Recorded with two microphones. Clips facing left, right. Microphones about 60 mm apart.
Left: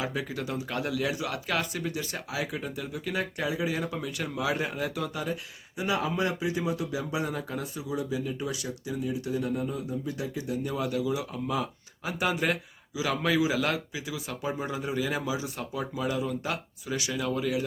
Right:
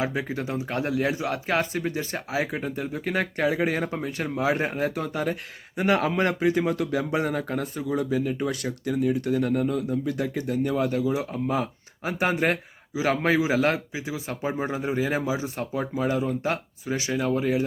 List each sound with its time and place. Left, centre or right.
0.0 s a man's voice: right